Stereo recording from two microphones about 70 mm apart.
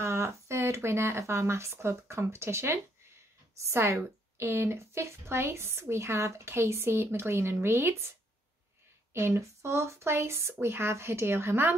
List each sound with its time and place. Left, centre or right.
0.0 s a woman's voice: right
9.1 s a woman's voice: right